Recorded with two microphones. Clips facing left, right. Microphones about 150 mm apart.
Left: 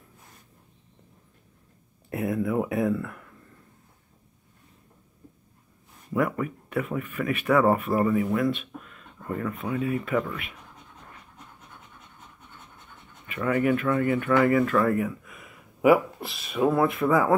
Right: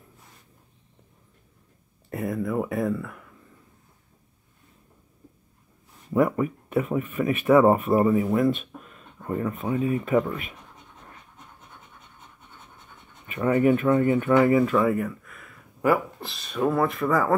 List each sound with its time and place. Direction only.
2.0 s speech: centre (ahead or behind)
6.1 s speech: 25° right (ahead or behind)
13.3 s speech: 25° right (ahead or behind)
14.8 s a sound: centre (ahead or behind)
15.9 s speech: 5° left (ahead or behind)